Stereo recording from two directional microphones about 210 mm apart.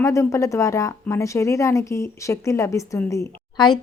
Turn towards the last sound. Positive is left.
turn(degrees=20)  # may be behind; listen again after turning